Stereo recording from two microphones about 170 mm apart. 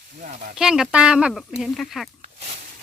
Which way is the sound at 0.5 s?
5° right (ahead or behind).